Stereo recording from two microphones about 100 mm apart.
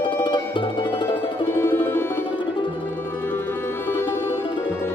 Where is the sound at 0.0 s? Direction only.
55° left (ahead or behind).